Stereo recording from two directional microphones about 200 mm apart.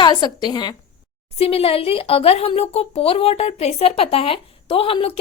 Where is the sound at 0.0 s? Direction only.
20° left (ahead or behind).